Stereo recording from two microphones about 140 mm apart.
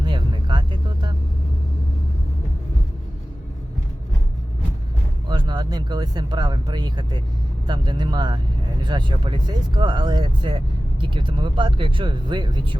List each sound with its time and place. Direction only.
0.0 s music: 35° right (ahead or behind)
5.3 s speech: 30° right (ahead or behind)